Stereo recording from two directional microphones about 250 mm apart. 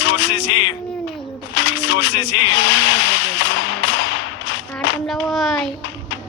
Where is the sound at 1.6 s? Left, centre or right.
Left.